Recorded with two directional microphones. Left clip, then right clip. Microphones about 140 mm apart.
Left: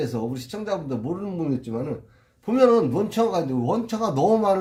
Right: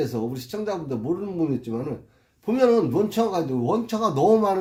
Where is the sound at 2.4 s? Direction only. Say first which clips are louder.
Left 2 dB; 20° right (ahead or behind).